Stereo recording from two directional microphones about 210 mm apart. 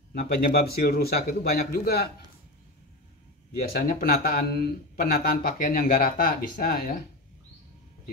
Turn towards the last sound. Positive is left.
turn(degrees=45)  # may be behind; listen again after turning